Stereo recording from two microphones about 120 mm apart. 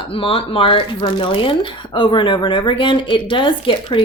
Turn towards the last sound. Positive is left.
turn(degrees=45)  # may be behind; listen again after turning